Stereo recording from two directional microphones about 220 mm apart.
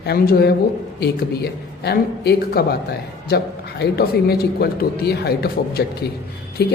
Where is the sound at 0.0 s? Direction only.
45° left (ahead or behind).